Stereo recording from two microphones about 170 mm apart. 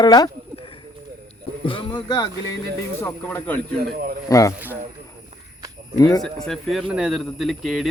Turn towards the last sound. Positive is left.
turn(degrees=0)  # may be behind; listen again after turning